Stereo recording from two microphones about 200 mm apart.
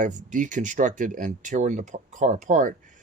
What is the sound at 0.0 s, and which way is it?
Speech, 40° right (ahead or behind).